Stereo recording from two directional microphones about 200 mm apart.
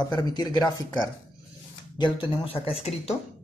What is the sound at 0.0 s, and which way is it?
Speech, 20° left (ahead or behind).